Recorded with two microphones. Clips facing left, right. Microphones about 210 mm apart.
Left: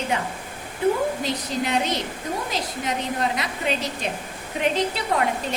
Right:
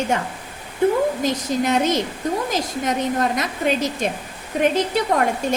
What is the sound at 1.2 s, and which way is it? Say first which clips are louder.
A woman's voice: right 5 dB; 45° right (ahead or behind).